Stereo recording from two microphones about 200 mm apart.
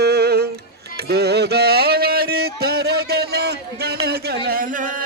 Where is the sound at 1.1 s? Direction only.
55° right (ahead or behind).